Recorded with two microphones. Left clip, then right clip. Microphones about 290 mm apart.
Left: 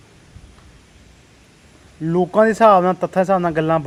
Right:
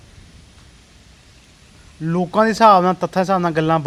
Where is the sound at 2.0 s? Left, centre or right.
Right.